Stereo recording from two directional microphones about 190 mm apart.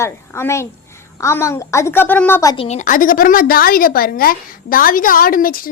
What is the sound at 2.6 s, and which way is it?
A woman's voice, 35° left (ahead or behind).